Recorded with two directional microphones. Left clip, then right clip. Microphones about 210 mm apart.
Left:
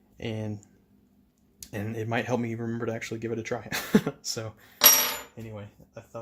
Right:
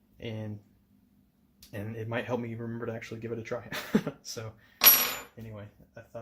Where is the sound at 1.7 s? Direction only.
45° left (ahead or behind).